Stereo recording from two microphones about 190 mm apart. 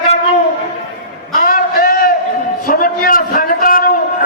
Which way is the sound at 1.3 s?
50° left (ahead or behind).